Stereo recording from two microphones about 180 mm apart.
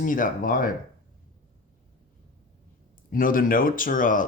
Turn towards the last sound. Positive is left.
turn(degrees=50)  # may be behind; listen again after turning